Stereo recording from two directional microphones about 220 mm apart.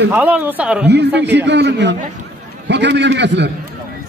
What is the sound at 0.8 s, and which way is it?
A man's voice, 50° right (ahead or behind).